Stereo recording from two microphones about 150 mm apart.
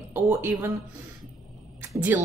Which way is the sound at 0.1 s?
15° right (ahead or behind).